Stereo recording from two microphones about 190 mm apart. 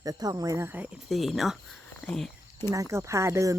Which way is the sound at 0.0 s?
20° right (ahead or behind).